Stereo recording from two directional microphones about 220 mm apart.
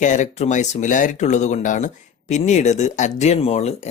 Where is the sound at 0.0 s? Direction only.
35° left (ahead or behind).